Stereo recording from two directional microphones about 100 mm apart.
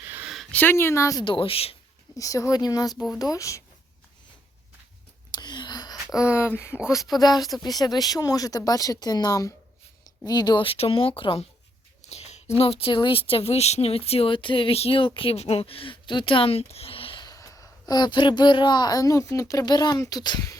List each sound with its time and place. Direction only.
0.0 s a sound: 20° right (ahead or behind)
0.5 s speech: 20° left (ahead or behind)
1.2 s speech: 60° left (ahead or behind)
2.1 s speech: 35° left (ahead or behind)
5.3 s gasp: 45° left (ahead or behind)
6.1 s speech: 25° left (ahead or behind)
10.2 s speech: 45° left (ahead or behind)
10.7 s speech: 70° left (ahead or behind)
12.0 s a sound: 90° left
12.5 s speech: 75° left (ahead or behind)
17.2 s speech: 35° left (ahead or behind)